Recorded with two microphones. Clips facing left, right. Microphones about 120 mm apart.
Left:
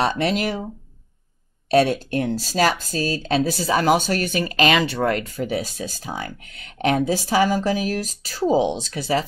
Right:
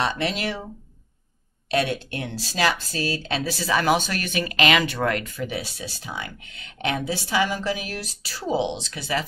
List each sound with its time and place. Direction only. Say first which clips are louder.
0.0 s speech: left 4 dB; 40° left (ahead or behind)
1.7 s speech: left 7 dB; 40° left (ahead or behind)